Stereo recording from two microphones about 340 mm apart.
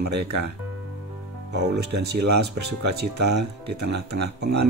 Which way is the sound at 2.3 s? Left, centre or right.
Right.